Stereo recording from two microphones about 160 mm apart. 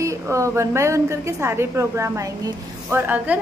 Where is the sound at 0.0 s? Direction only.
20° right (ahead or behind).